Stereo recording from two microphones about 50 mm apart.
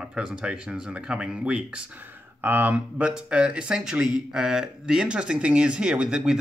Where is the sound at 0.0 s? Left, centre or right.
Centre.